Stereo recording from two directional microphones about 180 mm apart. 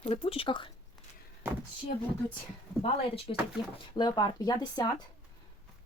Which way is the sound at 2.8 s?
30° left (ahead or behind).